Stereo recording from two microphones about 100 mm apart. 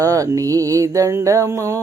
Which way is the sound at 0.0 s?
35° right (ahead or behind).